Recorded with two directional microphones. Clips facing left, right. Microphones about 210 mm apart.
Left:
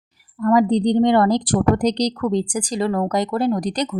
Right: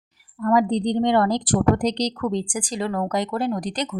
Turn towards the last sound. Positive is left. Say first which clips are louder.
# left 5 dB
turn(degrees=40)  # may be behind; listen again after turning